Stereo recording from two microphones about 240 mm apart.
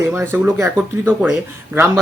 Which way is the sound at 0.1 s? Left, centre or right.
Centre.